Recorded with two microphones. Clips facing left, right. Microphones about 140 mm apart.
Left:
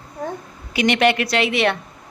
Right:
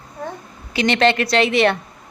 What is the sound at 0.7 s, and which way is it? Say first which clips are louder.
A woman's voice: even; 15° left (ahead or behind).